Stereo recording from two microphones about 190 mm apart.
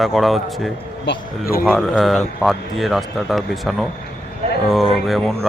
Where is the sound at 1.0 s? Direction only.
60° left (ahead or behind).